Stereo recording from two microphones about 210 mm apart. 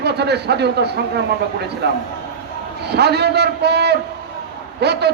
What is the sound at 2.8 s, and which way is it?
A man's voice, 50° right (ahead or behind).